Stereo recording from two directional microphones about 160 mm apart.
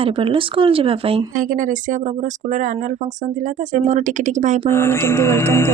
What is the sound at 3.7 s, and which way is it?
Speech, 50° right (ahead or behind).